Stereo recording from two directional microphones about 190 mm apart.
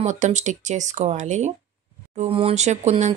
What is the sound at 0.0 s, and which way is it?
Speech, 40° right (ahead or behind).